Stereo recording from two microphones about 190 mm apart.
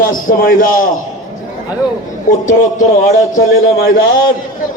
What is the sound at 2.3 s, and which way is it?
Speech, 45° left (ahead or behind).